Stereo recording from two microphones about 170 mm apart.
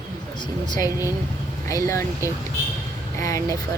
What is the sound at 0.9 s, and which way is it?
Speech, 15° right (ahead or behind).